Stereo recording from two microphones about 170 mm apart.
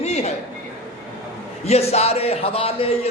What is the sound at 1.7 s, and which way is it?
A man's voice, 40° left (ahead or behind).